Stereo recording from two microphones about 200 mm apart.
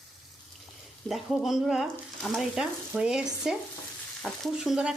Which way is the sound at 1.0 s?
Centre (ahead or behind).